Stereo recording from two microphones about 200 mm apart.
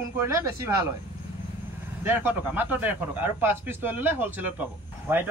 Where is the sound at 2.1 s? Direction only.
10° right (ahead or behind).